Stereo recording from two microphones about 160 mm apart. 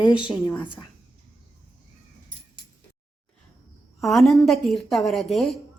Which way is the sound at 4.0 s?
Centre (ahead or behind).